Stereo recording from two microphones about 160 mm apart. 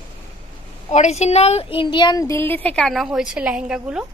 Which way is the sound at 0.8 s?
45° left (ahead or behind).